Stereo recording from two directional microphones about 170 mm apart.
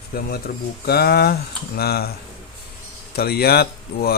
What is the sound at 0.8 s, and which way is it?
Speech, 65° left (ahead or behind).